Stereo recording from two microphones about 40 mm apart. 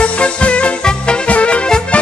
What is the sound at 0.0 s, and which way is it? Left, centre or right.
Music, left.